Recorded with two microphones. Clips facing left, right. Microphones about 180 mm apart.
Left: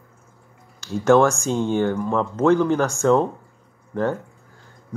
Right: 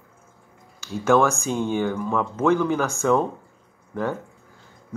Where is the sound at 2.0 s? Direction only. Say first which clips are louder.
Left 3 dB; 15° left (ahead or behind).